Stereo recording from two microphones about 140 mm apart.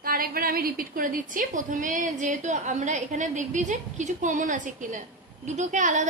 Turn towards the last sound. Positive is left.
turn(degrees=-60)  # may be behind; listen again after turning